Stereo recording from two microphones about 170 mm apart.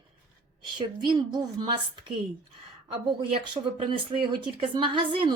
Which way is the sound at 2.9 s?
30° right (ahead or behind).